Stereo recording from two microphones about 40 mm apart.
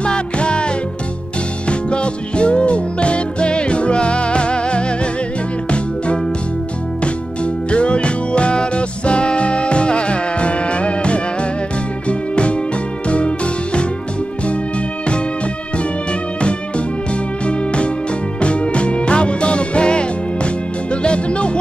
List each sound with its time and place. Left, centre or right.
0.0 s music: left
1.7 s music: left
7.4 s music: left
16.3 s music: left